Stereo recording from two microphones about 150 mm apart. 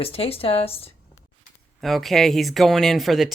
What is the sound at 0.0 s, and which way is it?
Speech, 40° left (ahead or behind).